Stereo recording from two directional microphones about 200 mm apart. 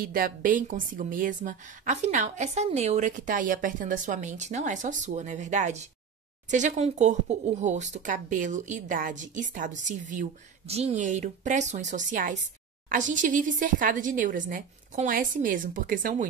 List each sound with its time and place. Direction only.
0.0 s speech: 45° right (ahead or behind)